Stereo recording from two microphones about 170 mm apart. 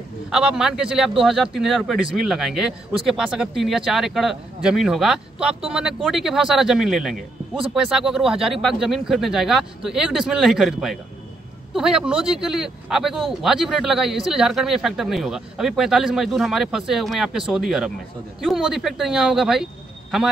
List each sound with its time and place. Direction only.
0.3 s speech: 5° right (ahead or behind)